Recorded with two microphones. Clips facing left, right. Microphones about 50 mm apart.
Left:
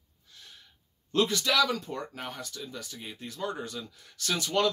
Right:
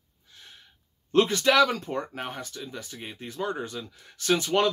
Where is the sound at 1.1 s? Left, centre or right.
Right.